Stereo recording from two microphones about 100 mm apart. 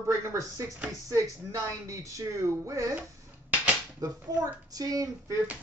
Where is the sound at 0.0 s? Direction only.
30° right (ahead or behind).